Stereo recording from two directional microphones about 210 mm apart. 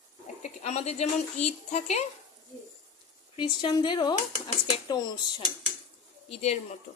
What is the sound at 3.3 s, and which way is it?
Speech, 20° left (ahead or behind).